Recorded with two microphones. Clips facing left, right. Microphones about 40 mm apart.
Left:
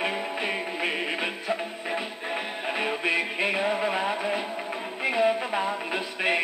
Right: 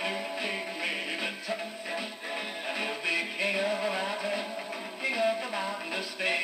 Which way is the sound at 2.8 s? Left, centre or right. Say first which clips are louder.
Left 5 dB; left.